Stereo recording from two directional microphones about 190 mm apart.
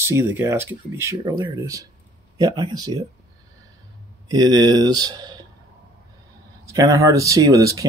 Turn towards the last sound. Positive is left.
turn(degrees=-15)  # may be behind; listen again after turning